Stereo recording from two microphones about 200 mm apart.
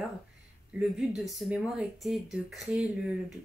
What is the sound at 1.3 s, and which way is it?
Speech, 5° right (ahead or behind).